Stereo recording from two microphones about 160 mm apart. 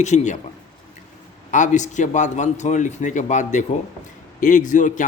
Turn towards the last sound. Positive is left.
turn(degrees=50)  # may be behind; listen again after turning